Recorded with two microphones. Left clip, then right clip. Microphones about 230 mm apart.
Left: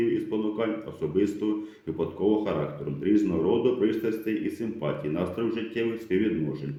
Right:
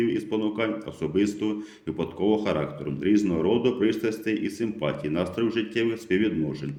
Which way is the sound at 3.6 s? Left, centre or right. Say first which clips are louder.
Right 1 dB; right.